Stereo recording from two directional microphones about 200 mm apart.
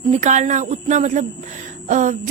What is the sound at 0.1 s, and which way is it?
A woman's voice, 35° right (ahead or behind).